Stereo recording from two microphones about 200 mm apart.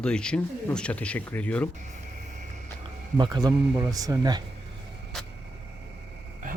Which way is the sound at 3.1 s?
20° right (ahead or behind).